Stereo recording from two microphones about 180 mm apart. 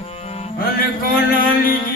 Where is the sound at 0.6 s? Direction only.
55° left (ahead or behind).